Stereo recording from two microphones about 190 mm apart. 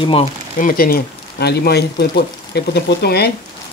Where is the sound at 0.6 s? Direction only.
50° left (ahead or behind).